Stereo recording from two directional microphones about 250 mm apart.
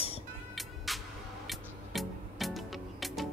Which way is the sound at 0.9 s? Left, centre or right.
Centre.